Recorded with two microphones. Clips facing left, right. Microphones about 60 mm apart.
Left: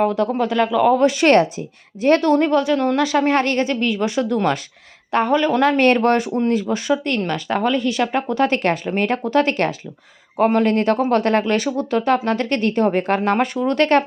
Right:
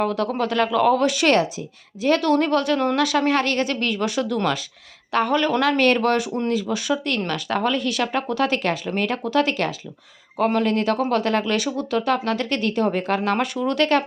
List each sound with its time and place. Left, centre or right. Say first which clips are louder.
0.0 s speech: left 4 dB; centre
1.0 s speech: left 4 dB; left
2.3 s speech: left 3 dB; centre
2.7 s speech: left 3 dB; centre
3.0 s a woman's voice: left 3 dB; left
10.3 s a woman's voice: left 4 dB; left